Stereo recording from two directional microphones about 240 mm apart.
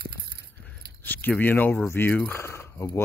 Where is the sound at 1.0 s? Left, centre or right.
Centre.